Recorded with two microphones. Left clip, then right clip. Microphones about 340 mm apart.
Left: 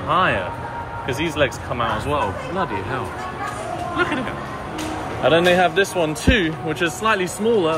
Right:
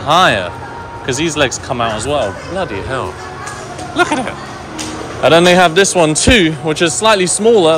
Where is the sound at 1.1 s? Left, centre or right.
Centre.